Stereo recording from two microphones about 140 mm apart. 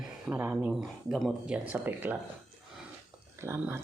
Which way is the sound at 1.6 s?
15° right (ahead or behind).